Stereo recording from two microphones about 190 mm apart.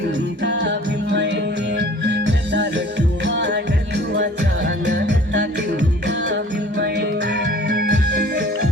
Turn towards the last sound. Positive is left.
turn(degrees=-65)  # may be behind; listen again after turning